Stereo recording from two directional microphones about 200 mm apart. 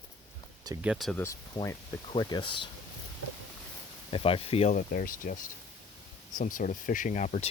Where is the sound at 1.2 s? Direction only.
15° left (ahead or behind).